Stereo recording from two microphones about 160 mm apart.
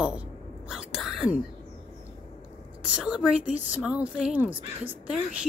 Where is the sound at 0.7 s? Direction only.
Centre (ahead or behind).